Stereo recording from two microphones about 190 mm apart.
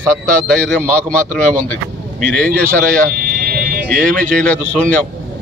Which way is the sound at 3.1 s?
55° right (ahead or behind).